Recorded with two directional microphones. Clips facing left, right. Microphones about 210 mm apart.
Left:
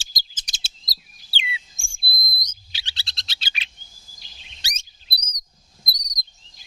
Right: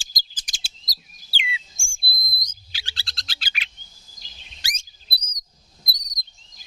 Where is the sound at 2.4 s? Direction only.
20° left (ahead or behind).